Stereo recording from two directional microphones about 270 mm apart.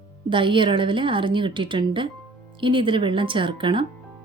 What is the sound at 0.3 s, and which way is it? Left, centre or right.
A woman's voice, centre.